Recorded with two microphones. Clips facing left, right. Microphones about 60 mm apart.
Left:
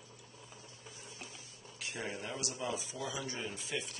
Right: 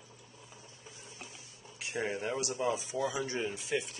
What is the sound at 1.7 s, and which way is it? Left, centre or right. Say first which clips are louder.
A man's voice: right 6 dB; right.